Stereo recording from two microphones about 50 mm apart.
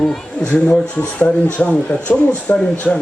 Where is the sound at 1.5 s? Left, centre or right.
Left.